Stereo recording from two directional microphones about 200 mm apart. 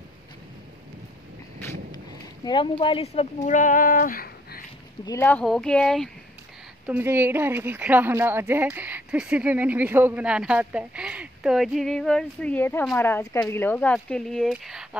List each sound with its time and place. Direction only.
2.4 s speech: 25° left (ahead or behind); by 4.6 s 45° left (ahead or behind)
5.0 s speech: 10° left (ahead or behind)
6.9 s speech: 10° right (ahead or behind)